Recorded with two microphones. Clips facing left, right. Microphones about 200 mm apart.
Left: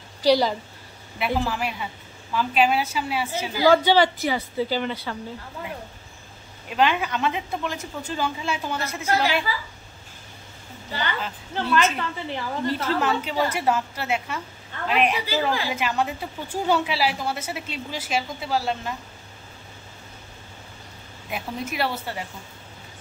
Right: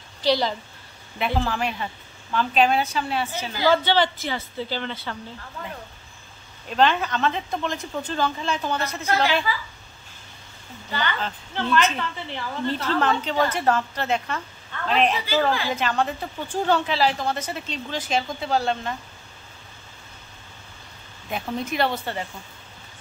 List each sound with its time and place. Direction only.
0.2 s a woman's voice: 10° left (ahead or behind)
6.7 s a woman's voice: 10° left (ahead or behind)
10.9 s a woman's voice: 35° left (ahead or behind)
11.1 s a woman's voice: 10° left (ahead or behind)
21.3 s speech: 5° left (ahead or behind)